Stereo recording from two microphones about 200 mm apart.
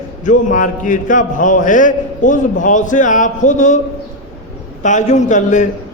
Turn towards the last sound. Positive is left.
turn(degrees=40)  # may be behind; listen again after turning